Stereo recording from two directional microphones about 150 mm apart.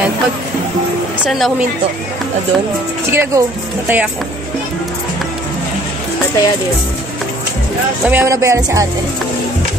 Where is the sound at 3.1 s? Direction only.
15° right (ahead or behind).